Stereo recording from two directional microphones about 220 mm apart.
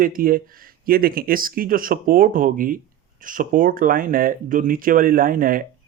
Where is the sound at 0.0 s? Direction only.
40° right (ahead or behind).